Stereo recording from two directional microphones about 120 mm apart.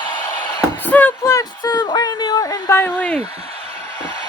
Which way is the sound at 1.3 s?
35° left (ahead or behind).